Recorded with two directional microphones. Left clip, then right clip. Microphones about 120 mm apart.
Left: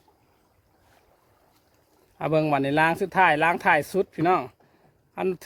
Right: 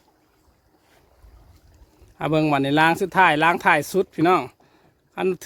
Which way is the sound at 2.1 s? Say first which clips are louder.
Right 2 dB; 15° right (ahead or behind).